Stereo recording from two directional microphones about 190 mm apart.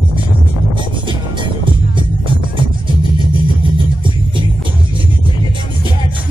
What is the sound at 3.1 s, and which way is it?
Music, 25° right (ahead or behind).